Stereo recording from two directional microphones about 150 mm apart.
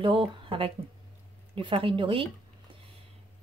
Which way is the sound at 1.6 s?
35° right (ahead or behind).